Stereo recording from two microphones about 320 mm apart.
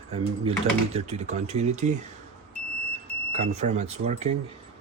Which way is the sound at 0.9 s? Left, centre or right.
Centre.